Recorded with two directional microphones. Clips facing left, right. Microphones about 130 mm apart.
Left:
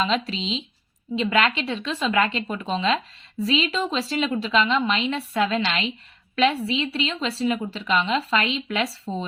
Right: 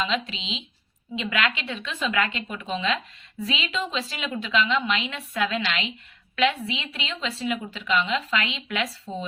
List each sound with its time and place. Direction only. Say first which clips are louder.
0.0 s speech: left 4 dB; 35° left (ahead or behind)